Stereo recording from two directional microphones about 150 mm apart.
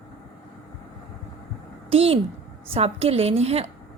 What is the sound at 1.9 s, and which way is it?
A woman's voice, 40° right (ahead or behind).